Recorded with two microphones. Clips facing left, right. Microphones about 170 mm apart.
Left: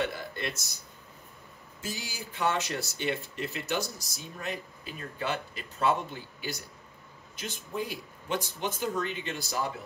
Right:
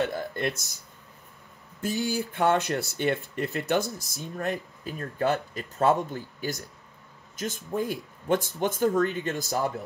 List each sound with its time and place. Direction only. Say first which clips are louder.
0.1 s speech: right 6 dB; 50° right (ahead or behind)
1.8 s speech: right 11 dB; 55° right (ahead or behind)